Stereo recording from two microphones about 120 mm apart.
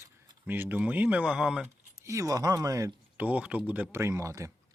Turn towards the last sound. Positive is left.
turn(degrees=-25)  # may be behind; listen again after turning